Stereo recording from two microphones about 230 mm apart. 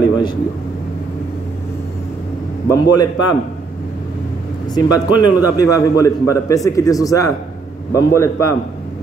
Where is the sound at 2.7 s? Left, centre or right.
Centre.